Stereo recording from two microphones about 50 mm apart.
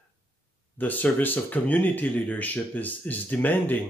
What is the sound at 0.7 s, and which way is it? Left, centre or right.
Speech, left.